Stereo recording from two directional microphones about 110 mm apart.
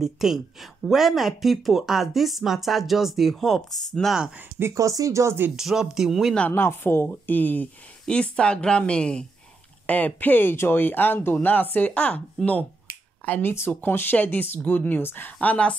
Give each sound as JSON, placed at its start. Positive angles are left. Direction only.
{"t": 0.0, "sound": "speech", "side_deg": -5}
{"t": 4.6, "sound": "speech", "side_deg": -25}
{"t": 5.6, "sound": "speech", "side_deg": -5}
{"t": 6.5, "sound": "a woman's voice", "side_deg": 20}